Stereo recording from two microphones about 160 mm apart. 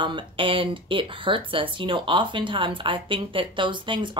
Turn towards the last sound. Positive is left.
turn(degrees=-30)  # may be behind; listen again after turning